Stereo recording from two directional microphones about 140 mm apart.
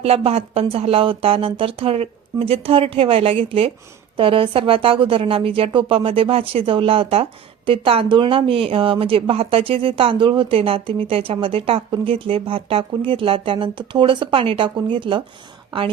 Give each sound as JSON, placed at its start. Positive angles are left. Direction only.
{"t": 0.0, "sound": "a woman's voice", "side_deg": -45}